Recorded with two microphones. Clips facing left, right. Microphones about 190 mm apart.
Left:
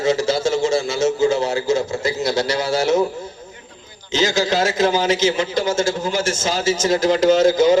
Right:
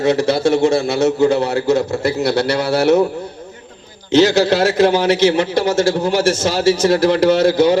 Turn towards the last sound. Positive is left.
turn(degrees=-60)  # may be behind; listen again after turning